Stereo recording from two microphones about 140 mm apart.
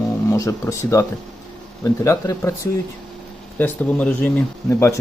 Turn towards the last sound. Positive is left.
turn(degrees=20)  # may be behind; listen again after turning